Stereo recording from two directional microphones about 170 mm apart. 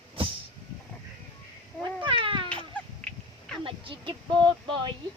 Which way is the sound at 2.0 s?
30° right (ahead or behind).